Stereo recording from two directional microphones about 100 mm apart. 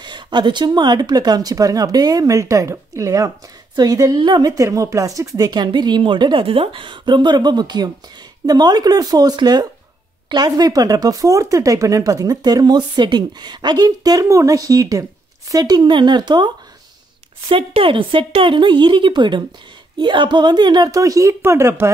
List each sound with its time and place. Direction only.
0.0 s speech: 50° right (ahead or behind)
4.2 s speech: 50° right (ahead or behind)
4.5 s speech: 35° right (ahead or behind); by 6.4 s 50° right (ahead or behind)
6.4 s speech: 65° right (ahead or behind); by 16.5 s 45° right (ahead or behind)
17.5 s a woman's voice: 65° right (ahead or behind); by 21.9 s 25° right (ahead or behind)